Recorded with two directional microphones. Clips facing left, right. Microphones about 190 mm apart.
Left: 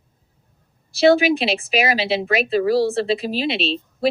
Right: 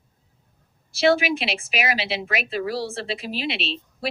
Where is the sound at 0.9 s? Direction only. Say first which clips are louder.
Left 5 dB; 35° left (ahead or behind).